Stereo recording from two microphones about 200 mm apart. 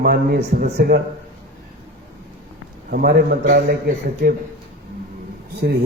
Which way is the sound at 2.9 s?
50° right (ahead or behind).